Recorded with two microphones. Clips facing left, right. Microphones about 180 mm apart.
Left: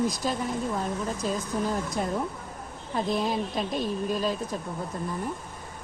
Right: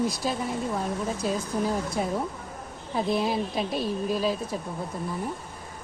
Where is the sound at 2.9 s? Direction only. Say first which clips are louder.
Right 1 dB; 5° right (ahead or behind).